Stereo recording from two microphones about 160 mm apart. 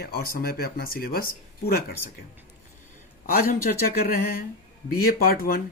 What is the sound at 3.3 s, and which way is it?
Speech, 65° left (ahead or behind).